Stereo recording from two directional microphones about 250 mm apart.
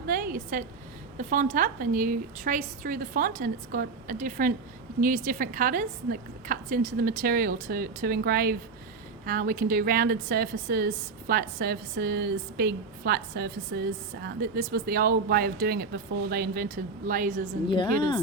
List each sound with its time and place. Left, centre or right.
0.1 s a sound: right
1.3 s a woman's voice: right
17.7 s a woman's voice: centre